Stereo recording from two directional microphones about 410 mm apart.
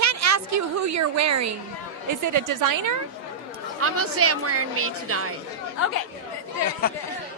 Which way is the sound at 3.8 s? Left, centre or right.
Right.